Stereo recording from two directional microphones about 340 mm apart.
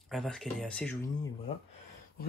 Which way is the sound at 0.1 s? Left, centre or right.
Centre.